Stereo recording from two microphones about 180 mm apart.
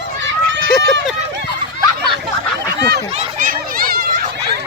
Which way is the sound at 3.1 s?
45° right (ahead or behind).